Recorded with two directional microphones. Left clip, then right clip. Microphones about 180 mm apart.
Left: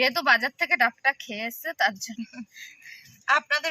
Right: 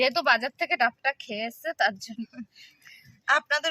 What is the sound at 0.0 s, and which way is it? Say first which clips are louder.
Speech: left 1 dB; 35° right (ahead or behind).